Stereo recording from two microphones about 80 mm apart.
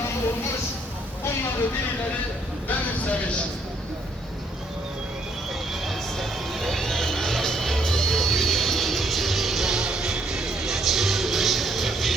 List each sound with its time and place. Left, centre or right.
2.6 s speech: centre
5.8 s music: centre